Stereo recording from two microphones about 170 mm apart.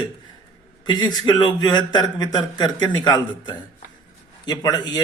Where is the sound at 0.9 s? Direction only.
25° left (ahead or behind).